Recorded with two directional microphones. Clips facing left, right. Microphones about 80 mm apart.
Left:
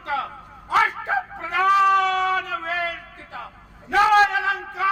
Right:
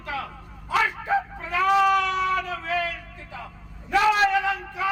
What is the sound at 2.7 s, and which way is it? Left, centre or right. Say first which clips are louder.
A man's voice: even; left.